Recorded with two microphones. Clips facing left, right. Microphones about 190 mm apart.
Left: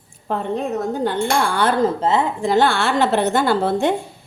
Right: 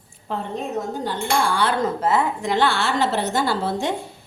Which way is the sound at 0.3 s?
55° left (ahead or behind).